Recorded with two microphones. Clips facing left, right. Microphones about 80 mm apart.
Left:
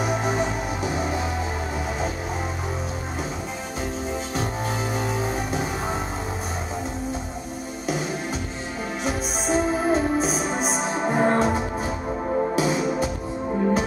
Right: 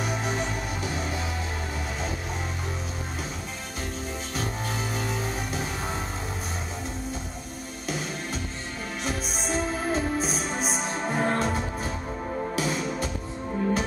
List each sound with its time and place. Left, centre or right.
0.0 s music: centre
4.4 s music: centre
9.0 s music: centre
12.3 s music: left
12.5 s music: centre